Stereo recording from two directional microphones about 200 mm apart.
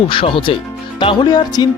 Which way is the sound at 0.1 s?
25° left (ahead or behind).